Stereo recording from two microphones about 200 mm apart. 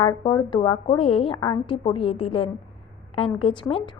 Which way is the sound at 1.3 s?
20° left (ahead or behind).